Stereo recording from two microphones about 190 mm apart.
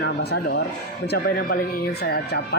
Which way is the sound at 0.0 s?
60° left (ahead or behind).